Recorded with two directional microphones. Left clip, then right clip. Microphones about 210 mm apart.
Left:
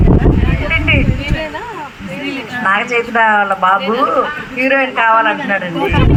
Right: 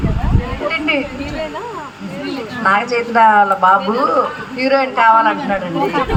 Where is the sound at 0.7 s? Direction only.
10° left (ahead or behind).